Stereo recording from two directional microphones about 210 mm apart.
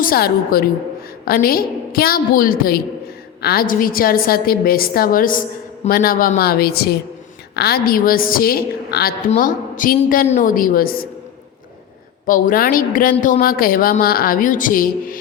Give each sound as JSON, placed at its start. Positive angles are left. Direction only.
{"t": 0.0, "sound": "a woman's voice", "side_deg": 45}
{"t": 12.2, "sound": "a woman's voice", "side_deg": 40}